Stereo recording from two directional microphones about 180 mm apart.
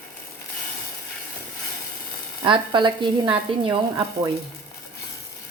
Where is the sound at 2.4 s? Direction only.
25° right (ahead or behind).